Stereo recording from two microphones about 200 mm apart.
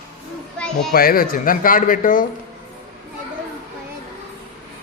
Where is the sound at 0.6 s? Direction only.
Centre (ahead or behind).